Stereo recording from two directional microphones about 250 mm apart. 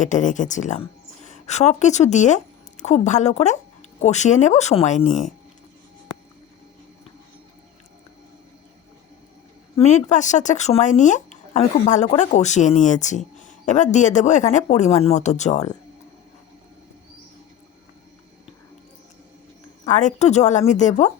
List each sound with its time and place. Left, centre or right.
0.0 s a woman's voice: left
9.7 s speech: left
19.8 s speech: left